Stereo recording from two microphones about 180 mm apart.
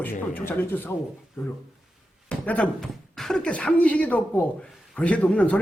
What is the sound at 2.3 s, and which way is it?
Speech, 5° left (ahead or behind).